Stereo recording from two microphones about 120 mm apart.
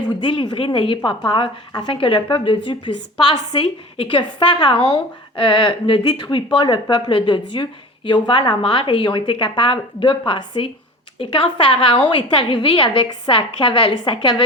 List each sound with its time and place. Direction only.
0.1 s speech: 45° left (ahead or behind)